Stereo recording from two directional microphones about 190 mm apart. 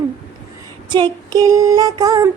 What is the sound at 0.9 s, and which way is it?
Female singing, 25° right (ahead or behind).